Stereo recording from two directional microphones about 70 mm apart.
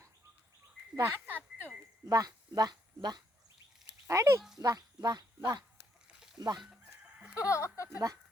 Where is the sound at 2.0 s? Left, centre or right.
Right.